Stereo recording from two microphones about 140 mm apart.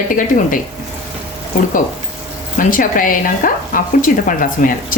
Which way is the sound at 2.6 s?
75° left (ahead or behind).